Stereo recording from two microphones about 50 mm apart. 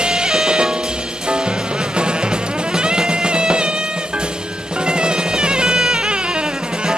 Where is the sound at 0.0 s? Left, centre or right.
Centre.